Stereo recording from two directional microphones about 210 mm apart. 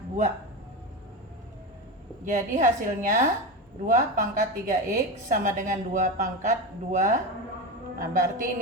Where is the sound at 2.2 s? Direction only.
35° right (ahead or behind).